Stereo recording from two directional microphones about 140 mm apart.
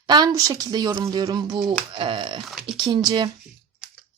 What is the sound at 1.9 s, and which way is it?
Speech, 40° right (ahead or behind).